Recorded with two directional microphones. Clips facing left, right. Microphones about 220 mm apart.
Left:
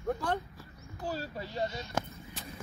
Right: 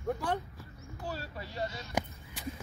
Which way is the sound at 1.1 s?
25° left (ahead or behind).